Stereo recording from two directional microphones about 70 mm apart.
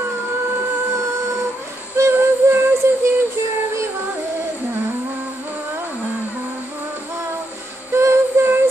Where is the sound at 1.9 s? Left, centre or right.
Right.